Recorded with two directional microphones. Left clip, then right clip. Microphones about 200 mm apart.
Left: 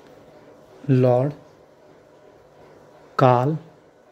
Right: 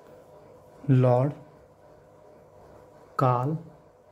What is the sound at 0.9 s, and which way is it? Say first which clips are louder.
Speech: left 5 dB; centre (ahead or behind).